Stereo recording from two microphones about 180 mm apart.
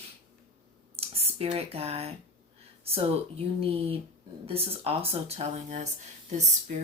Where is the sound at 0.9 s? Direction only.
35° right (ahead or behind).